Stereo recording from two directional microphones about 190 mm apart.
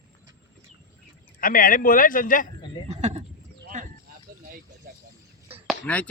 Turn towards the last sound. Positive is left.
turn(degrees=-10)  # may be behind; listen again after turning